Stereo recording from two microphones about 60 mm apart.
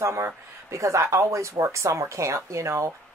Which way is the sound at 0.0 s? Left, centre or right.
Right.